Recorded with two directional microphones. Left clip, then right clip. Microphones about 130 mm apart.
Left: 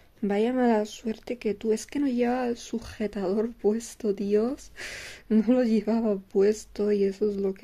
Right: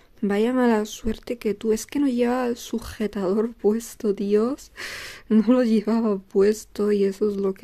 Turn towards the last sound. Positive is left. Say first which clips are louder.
# right 3 dB
turn(degrees=-25)  # may be behind; listen again after turning